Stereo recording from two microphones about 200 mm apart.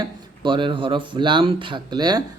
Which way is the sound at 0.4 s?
25° right (ahead or behind).